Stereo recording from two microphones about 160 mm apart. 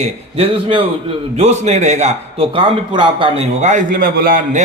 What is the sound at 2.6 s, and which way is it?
Speech, 30° right (ahead or behind).